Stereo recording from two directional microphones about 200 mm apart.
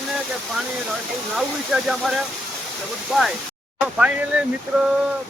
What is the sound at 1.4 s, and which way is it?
Speech, 5° right (ahead or behind).